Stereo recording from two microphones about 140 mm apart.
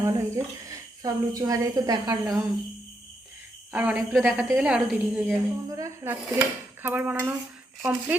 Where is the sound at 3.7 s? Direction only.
10° right (ahead or behind).